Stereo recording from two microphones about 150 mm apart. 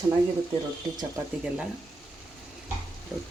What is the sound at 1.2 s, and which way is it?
Speech, 15° right (ahead or behind).